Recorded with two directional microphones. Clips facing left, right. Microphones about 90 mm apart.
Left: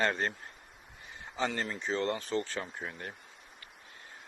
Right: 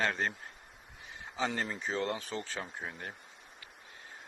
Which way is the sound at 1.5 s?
10° right (ahead or behind).